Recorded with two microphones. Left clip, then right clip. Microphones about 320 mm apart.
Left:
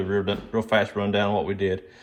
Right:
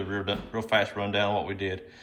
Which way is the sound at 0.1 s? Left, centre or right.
Centre.